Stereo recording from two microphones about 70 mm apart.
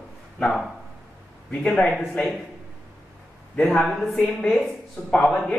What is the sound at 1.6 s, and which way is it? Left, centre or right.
Speech, centre.